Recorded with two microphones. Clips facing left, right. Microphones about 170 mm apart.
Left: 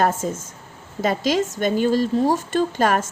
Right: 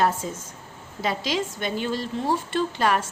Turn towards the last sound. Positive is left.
turn(degrees=45)  # may be behind; listen again after turning